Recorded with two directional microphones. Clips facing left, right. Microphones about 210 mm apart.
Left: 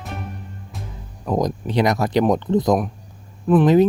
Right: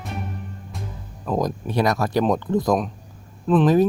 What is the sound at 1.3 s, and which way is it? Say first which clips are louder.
Speech: left 2 dB; 15° left (ahead or behind).